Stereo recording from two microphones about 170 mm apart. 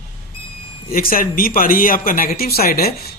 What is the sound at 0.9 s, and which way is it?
Speech, 55° left (ahead or behind).